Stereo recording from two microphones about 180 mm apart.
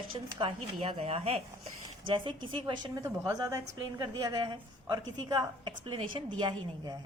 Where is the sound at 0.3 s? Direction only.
30° right (ahead or behind).